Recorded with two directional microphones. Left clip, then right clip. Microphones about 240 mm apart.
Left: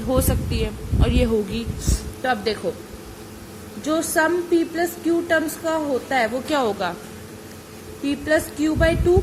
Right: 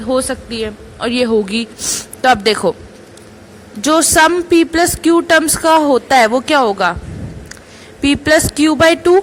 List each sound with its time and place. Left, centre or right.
0.1 s a woman's voice: centre; by 2.6 s right
3.8 s a woman's voice: right
8.0 s a woman's voice: right